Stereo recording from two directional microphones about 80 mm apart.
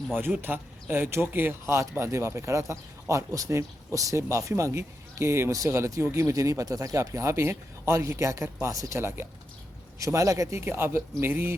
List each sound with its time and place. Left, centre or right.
0.1 s speech: right
9.0 s speech: right
10.0 s speech: right